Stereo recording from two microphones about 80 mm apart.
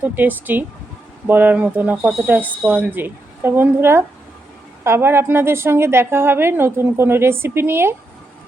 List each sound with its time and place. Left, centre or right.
0.0 s a woman's voice: right
2.0 s speech: centre
2.2 s a woman's voice: right